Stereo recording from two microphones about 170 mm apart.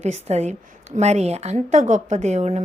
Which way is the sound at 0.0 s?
40° right (ahead or behind).